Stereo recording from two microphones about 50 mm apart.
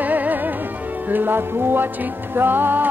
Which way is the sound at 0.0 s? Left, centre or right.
Right.